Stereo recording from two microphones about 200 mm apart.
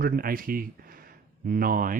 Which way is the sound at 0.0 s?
45° right (ahead or behind).